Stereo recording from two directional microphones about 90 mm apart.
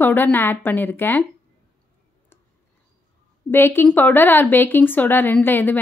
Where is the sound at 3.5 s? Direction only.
25° left (ahead or behind).